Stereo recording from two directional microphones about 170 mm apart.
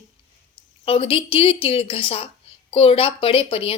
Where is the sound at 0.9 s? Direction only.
35° left (ahead or behind).